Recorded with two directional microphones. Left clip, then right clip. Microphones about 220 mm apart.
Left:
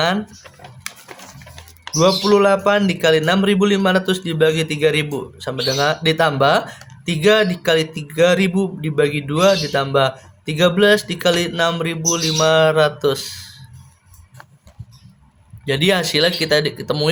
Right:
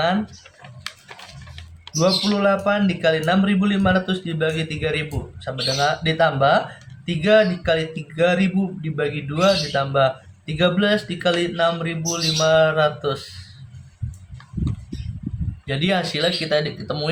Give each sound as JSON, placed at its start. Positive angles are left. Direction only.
{"t": 0.9, "sound": "a sound", "side_deg": 20}
{"t": 2.0, "sound": "speech", "side_deg": 50}
{"t": 15.6, "sound": "speech", "side_deg": 50}